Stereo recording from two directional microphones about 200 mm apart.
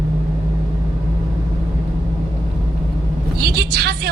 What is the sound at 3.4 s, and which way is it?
Vehicle, 55° right (ahead or behind).